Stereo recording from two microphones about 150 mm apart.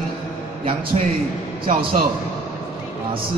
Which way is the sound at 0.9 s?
45° right (ahead or behind).